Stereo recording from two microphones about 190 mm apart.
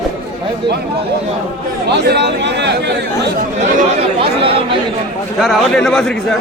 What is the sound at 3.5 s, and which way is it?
Speech, 35° right (ahead or behind).